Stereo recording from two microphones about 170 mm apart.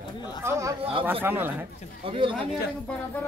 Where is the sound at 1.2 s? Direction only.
10° right (ahead or behind).